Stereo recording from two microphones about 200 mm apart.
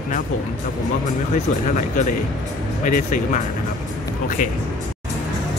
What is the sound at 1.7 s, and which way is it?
Speech, 40° left (ahead or behind).